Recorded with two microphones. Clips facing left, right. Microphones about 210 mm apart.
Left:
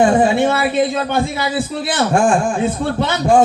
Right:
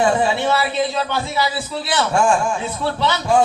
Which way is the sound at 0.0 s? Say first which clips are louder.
Left 5 dB; 50° left (ahead or behind).